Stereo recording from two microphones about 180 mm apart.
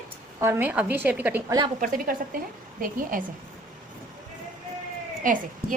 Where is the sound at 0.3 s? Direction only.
15° right (ahead or behind).